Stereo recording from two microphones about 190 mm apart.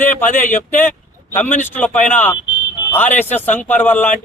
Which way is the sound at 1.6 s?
10° left (ahead or behind).